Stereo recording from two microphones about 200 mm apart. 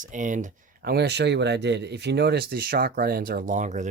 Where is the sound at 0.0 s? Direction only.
40° right (ahead or behind).